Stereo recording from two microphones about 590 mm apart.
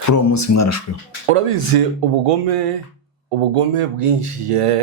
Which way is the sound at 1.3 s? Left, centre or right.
Right.